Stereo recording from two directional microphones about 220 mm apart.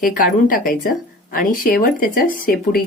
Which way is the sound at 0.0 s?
35° left (ahead or behind).